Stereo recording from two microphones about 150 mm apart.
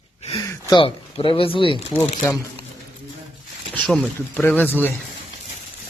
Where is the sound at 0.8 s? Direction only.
40° left (ahead or behind).